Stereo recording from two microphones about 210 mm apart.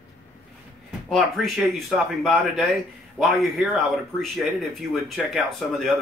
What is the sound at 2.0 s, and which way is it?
Speech, centre (ahead or behind).